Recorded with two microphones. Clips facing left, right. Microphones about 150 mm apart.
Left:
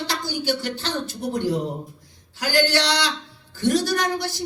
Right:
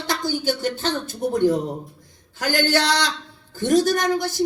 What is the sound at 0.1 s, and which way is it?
Speech, 45° right (ahead or behind).